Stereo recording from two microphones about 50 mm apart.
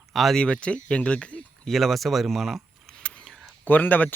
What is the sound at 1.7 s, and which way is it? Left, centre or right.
Speech, centre.